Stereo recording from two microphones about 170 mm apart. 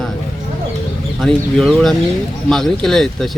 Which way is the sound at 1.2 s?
5° left (ahead or behind).